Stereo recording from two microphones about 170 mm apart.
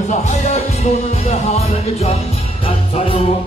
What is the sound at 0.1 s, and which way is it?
Music, 40° left (ahead or behind).